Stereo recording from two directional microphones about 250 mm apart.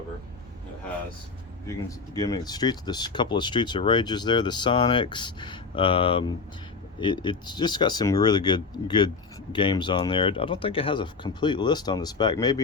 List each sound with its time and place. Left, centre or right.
2.1 s speech: centre